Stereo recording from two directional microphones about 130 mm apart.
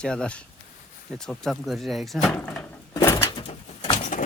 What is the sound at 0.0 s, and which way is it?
Speech, 5° left (ahead or behind).